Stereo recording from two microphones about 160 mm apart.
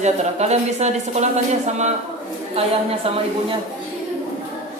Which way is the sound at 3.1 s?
35° right (ahead or behind).